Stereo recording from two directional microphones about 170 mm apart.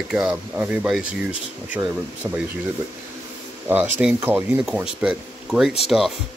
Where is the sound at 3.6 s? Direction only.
10° right (ahead or behind).